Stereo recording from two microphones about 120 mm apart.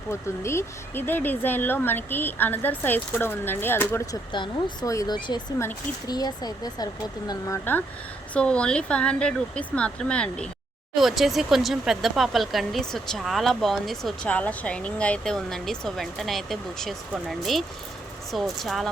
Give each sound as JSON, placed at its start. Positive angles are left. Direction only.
{"t": 0.1, "sound": "speech", "side_deg": 20}
{"t": 4.0, "sound": "speech", "side_deg": 35}